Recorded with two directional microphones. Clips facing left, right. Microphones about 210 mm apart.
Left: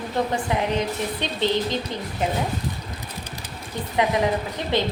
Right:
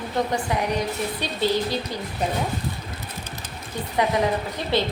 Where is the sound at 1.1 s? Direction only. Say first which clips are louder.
Even; 20° left (ahead or behind).